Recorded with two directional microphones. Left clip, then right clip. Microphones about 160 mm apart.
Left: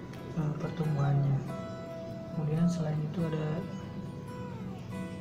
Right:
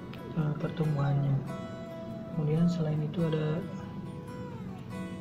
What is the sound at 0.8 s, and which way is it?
Speech, centre (ahead or behind).